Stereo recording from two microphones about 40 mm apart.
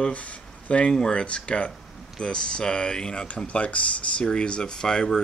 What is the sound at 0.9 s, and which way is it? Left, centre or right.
Speech, left.